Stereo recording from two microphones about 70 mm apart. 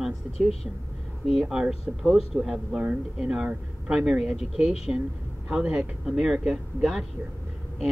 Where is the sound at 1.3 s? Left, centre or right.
Centre.